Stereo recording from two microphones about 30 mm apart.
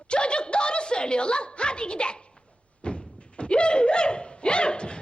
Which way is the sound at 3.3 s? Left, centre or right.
Left.